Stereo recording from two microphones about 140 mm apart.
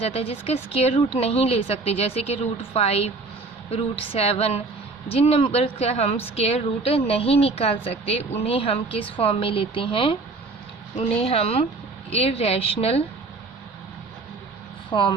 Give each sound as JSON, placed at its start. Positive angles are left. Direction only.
{"t": 0.0, "sound": "a woman's voice", "side_deg": 45}
{"t": 14.8, "sound": "speech", "side_deg": 35}